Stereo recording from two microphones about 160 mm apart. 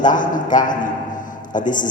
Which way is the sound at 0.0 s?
55° left (ahead or behind).